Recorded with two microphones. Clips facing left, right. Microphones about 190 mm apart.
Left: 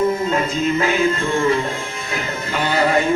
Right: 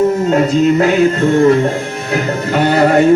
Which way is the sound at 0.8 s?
65° right (ahead or behind).